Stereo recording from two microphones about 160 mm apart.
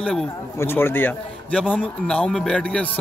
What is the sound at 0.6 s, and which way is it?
A man's voice, 15° left (ahead or behind).